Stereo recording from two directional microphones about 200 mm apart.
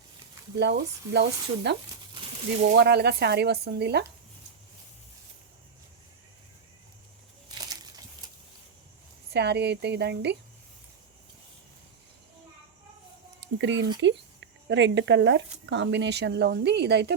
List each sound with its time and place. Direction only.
0.6 s a woman's voice: 60° right (ahead or behind)
2.7 s a woman's voice: 55° right (ahead or behind)
9.3 s a woman's voice: 55° right (ahead or behind)
13.4 s a woman's voice: 65° right (ahead or behind)